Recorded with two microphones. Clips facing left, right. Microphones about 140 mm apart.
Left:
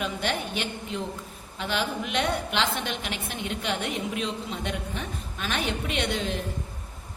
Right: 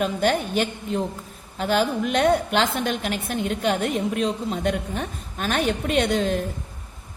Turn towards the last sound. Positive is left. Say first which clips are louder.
# right 7 dB
turn(degrees=-45)  # may be behind; listen again after turning